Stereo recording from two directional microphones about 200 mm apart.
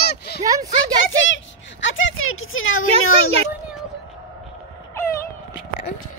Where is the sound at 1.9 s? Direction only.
90° left.